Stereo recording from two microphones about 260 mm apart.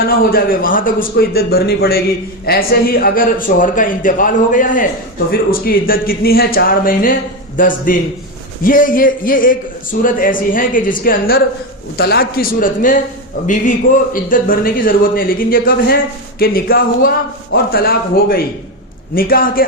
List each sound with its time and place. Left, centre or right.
0.0 s speech: left